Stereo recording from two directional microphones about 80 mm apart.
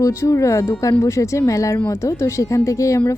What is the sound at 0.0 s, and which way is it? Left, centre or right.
Speech, left.